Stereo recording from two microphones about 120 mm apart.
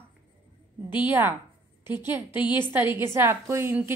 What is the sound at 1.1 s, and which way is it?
Speech, 15° right (ahead or behind).